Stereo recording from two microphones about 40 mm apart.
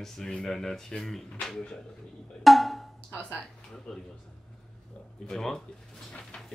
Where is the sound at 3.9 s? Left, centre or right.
Centre.